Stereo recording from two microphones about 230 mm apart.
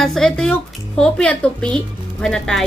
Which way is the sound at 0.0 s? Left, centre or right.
Centre.